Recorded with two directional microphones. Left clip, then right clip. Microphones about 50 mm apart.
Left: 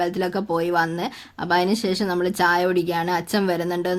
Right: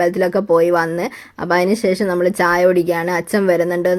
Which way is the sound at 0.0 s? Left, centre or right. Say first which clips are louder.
Right 8 dB; right.